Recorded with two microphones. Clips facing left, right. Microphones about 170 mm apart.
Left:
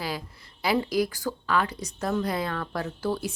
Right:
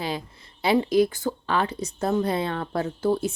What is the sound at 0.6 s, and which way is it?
A woman's voice, 25° right (ahead or behind).